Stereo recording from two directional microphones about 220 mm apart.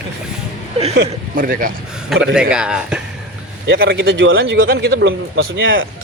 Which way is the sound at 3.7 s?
55° right (ahead or behind).